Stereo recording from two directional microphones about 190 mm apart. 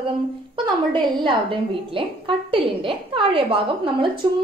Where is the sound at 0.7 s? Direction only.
25° right (ahead or behind).